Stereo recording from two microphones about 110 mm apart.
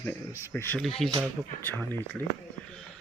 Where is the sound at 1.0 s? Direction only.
5° left (ahead or behind).